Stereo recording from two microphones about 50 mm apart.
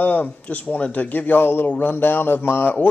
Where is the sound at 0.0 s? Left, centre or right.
Left.